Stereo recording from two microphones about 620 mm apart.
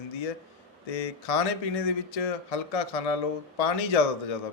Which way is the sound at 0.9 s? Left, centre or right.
Left.